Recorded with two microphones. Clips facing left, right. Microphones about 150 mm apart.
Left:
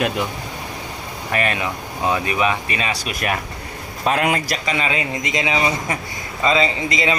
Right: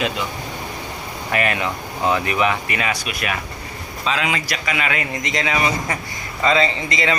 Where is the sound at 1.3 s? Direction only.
30° left (ahead or behind).